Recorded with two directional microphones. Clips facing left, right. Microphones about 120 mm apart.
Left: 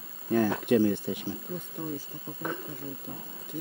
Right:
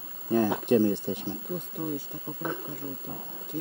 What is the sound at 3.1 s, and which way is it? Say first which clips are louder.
Speech: right 2 dB; 35° right (ahead or behind).